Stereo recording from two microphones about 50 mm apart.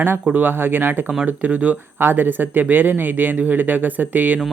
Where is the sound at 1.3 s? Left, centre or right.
Right.